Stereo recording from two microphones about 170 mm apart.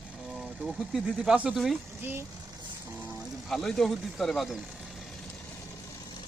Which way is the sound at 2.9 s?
15° right (ahead or behind).